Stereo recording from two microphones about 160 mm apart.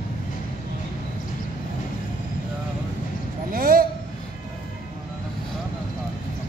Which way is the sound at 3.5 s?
60° right (ahead or behind).